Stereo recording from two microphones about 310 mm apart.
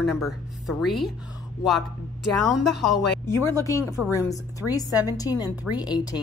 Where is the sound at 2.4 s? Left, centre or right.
Centre.